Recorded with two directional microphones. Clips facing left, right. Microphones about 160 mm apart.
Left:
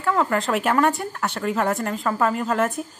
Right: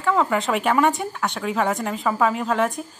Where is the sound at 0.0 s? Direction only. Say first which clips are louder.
Right 1 dB; centre (ahead or behind).